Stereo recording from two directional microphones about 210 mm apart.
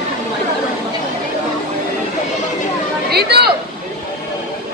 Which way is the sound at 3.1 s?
50° right (ahead or behind).